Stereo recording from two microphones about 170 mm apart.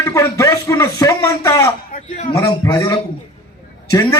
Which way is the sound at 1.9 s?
45° left (ahead or behind).